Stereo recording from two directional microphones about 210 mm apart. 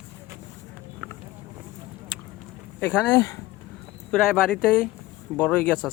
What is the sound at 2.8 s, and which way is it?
Speech, 10° left (ahead or behind).